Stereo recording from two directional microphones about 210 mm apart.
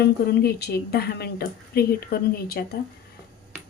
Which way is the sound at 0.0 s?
50° left (ahead or behind).